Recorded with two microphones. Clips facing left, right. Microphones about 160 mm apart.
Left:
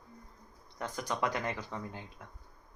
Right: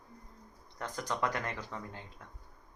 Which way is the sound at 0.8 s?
10° left (ahead or behind).